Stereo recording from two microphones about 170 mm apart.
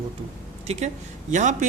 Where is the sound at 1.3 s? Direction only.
45° right (ahead or behind).